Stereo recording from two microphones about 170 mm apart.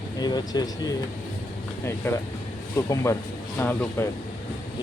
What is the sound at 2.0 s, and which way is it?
Speech, 15° left (ahead or behind).